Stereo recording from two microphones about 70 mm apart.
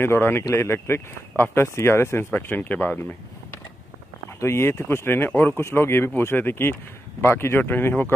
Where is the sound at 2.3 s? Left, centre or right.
Left.